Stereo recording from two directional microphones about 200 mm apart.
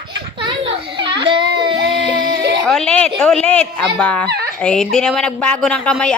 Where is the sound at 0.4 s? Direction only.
25° right (ahead or behind).